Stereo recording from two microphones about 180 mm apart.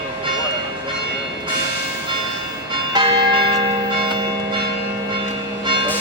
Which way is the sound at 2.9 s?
25° right (ahead or behind).